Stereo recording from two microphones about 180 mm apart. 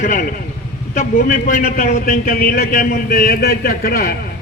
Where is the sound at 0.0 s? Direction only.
45° left (ahead or behind).